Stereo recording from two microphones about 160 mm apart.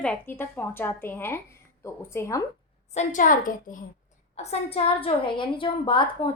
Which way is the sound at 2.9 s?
50° left (ahead or behind).